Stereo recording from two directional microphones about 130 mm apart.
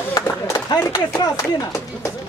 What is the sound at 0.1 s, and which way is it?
Speech, 25° left (ahead or behind).